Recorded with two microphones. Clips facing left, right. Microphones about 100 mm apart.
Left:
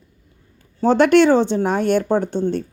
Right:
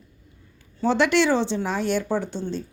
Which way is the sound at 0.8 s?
45° left (ahead or behind).